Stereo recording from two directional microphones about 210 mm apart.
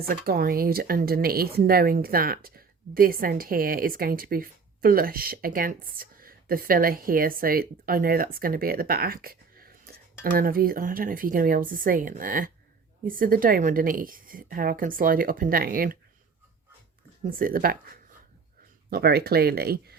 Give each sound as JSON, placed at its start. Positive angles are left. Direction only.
{"t": 0.1, "sound": "a woman's voice", "side_deg": -45}
{"t": 17.2, "sound": "speech", "side_deg": -40}
{"t": 18.9, "sound": "speech", "side_deg": -50}